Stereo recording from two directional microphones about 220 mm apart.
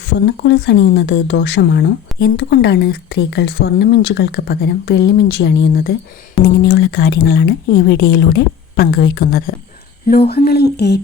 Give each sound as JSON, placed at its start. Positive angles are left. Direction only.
{"t": 0.1, "sound": "speech", "side_deg": 50}